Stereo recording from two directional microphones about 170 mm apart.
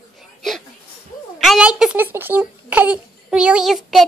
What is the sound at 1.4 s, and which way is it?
Speech, 5° right (ahead or behind).